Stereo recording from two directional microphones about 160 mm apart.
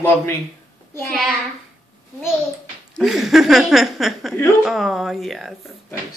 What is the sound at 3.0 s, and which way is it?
Speech, centre (ahead or behind).